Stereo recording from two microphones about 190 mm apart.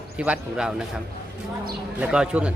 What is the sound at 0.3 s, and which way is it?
Speech, 5° right (ahead or behind).